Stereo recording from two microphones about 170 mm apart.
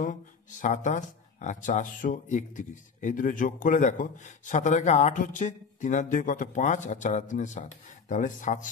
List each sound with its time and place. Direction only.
0.0 s speech: 50° left (ahead or behind)